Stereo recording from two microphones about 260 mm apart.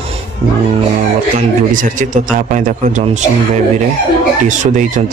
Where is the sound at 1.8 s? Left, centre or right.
Right.